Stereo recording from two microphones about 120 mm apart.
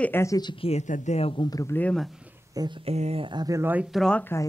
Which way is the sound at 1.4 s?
30° left (ahead or behind).